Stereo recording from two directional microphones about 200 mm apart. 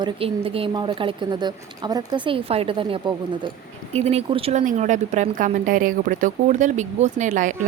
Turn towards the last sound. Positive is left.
turn(degrees=-40)  # may be behind; listen again after turning